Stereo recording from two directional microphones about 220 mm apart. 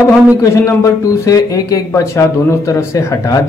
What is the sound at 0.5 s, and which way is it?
Speech, 15° left (ahead or behind).